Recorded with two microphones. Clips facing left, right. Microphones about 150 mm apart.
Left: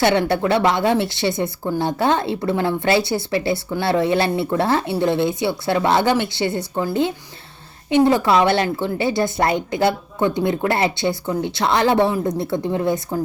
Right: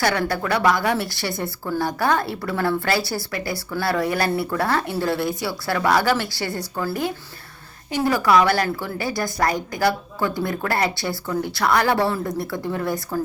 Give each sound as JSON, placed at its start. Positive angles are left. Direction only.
{"t": 0.0, "sound": "speech", "side_deg": 25}